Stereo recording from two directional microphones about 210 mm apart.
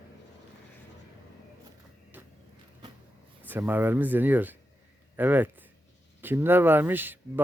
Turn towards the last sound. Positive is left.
turn(degrees=-10)  # may be behind; listen again after turning